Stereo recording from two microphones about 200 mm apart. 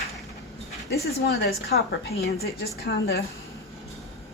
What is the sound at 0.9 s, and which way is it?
A woman's voice, 55° left (ahead or behind).